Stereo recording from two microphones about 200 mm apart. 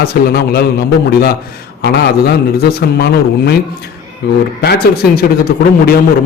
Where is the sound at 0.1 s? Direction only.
50° left (ahead or behind).